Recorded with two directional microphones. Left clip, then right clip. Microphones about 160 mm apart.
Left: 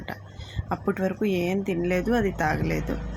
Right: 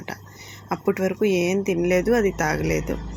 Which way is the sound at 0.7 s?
15° right (ahead or behind).